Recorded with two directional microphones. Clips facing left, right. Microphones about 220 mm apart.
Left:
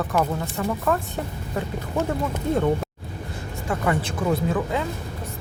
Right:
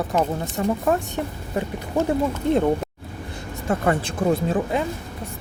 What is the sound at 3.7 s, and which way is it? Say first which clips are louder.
Speech: right 3 dB; 35° right (ahead or behind).